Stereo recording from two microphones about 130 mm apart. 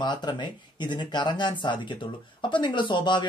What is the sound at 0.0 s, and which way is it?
Speech, 35° left (ahead or behind).